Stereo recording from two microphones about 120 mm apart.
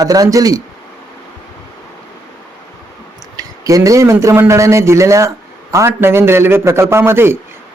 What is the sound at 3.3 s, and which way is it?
A man's voice, 30° right (ahead or behind).